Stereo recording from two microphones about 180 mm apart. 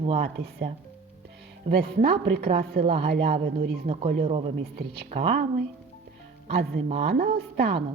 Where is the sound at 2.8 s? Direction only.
30° right (ahead or behind).